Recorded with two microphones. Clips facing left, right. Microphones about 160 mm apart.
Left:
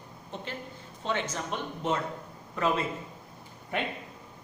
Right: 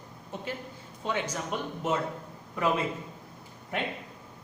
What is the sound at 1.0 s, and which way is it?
Speech, 10° right (ahead or behind).